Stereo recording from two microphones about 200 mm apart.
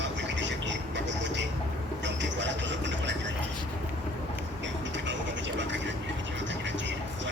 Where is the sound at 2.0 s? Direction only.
65° right (ahead or behind).